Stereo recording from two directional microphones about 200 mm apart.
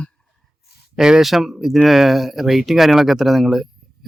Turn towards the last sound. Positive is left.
turn(degrees=0)  # may be behind; listen again after turning